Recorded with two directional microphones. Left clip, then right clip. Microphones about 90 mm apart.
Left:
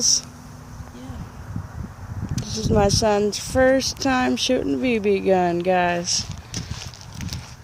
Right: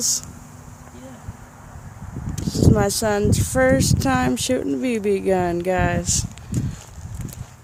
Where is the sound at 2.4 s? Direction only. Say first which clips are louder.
Even; 20° right (ahead or behind).